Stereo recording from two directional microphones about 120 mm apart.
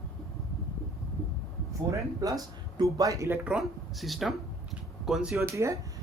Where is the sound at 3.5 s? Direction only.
Centre (ahead or behind).